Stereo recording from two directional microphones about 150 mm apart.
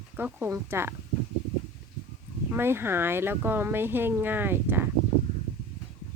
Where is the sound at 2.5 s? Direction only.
15° right (ahead or behind).